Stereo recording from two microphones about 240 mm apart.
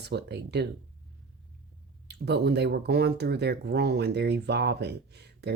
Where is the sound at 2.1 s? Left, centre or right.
Right.